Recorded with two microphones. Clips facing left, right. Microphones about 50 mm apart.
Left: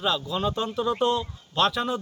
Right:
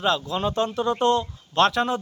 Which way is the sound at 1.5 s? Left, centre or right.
Right.